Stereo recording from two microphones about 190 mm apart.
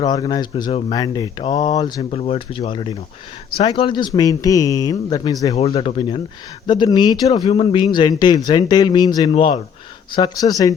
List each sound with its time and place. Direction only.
0.0 s speech: 20° left (ahead or behind)
5.5 s speech: 30° left (ahead or behind)